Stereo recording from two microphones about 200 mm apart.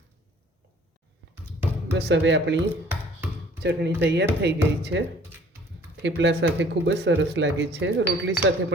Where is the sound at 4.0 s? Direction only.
60° right (ahead or behind).